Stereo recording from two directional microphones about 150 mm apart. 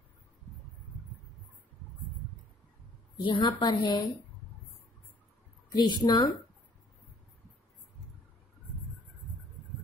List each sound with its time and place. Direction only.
3.2 s a woman's voice: 30° left (ahead or behind)
5.7 s speech: 25° left (ahead or behind)